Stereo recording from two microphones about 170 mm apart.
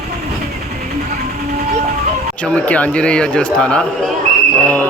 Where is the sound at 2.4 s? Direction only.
5° left (ahead or behind).